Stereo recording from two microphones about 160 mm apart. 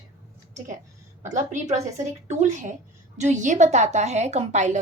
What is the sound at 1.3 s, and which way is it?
A woman's voice, 50° right (ahead or behind).